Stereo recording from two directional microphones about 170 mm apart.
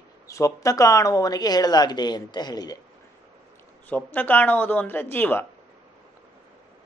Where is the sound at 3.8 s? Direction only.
10° left (ahead or behind).